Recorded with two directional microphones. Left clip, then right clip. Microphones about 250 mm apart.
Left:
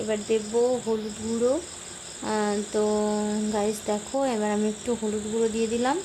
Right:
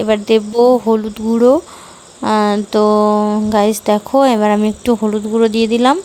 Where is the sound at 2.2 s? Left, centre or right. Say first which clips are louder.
Right 13 dB; right.